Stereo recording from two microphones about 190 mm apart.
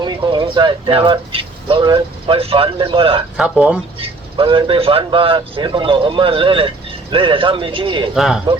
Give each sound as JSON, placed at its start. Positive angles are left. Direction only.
{"t": 0.0, "sound": "speech", "side_deg": -25}
{"t": 3.3, "sound": "speech", "side_deg": -5}
{"t": 4.0, "sound": "speech", "side_deg": -25}
{"t": 8.1, "sound": "speech", "side_deg": 0}